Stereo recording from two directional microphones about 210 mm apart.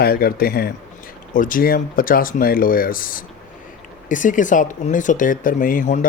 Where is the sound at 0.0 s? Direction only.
45° left (ahead or behind).